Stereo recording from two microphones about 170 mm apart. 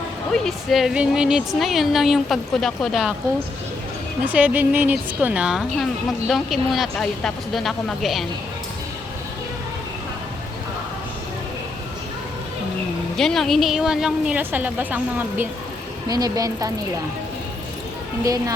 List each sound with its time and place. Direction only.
0.3 s speech: centre (ahead or behind)
4.3 s speech: 10° right (ahead or behind)
13.1 s speech: centre (ahead or behind)
16.0 s a woman's voice: 20° right (ahead or behind)